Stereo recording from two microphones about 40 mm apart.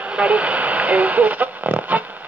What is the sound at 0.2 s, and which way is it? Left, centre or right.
Speech, right.